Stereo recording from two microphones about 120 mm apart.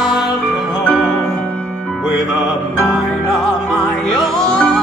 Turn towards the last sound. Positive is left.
turn(degrees=5)  # may be behind; listen again after turning